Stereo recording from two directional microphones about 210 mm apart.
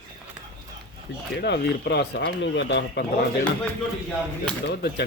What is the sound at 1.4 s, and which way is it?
Speech, 50° left (ahead or behind).